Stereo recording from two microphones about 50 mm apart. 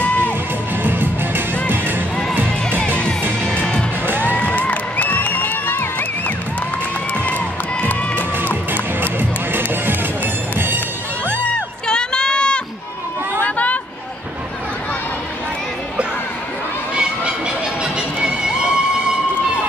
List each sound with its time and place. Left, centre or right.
0.8 s music: right
3.4 s music: centre
4.0 s music: right
4.3 s crowd: left
9.0 s music: right
11.9 s run: centre